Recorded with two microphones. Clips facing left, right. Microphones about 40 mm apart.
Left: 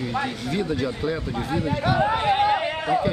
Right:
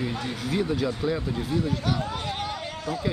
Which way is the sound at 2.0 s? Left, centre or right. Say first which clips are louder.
Left 11 dB; left.